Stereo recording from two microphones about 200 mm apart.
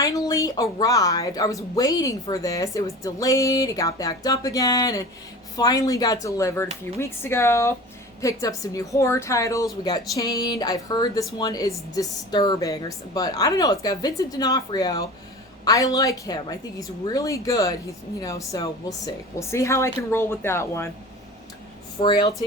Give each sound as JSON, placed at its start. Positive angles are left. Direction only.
{"t": 0.0, "sound": "a woman's voice", "side_deg": 15}
{"t": 22.0, "sound": "a woman's voice", "side_deg": 25}